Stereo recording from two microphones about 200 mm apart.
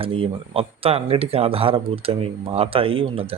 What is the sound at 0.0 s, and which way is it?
Speech, 25° right (ahead or behind).